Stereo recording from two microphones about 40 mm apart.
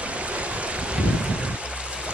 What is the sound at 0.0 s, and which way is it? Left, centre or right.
Boat, right.